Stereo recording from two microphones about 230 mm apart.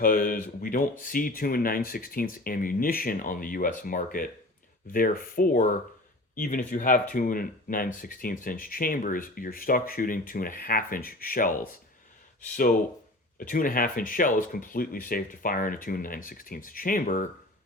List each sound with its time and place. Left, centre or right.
0.0 s speech: left
13.4 s speech: left